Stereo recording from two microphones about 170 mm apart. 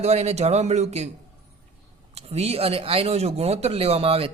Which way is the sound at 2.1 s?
40° right (ahead or behind).